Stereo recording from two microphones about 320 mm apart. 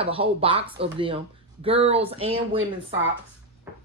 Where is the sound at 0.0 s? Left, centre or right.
Centre.